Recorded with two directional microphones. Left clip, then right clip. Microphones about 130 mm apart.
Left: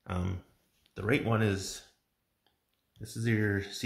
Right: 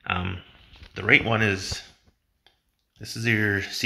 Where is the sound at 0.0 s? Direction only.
25° left (ahead or behind).